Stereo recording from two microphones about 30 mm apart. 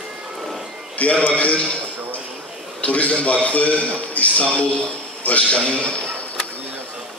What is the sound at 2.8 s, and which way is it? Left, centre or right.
A man's voice, left.